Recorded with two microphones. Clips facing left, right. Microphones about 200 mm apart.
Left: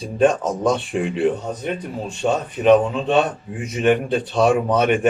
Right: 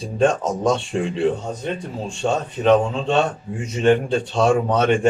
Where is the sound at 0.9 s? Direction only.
15° left (ahead or behind).